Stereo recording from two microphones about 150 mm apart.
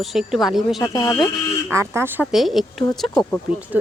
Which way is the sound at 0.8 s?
20° left (ahead or behind).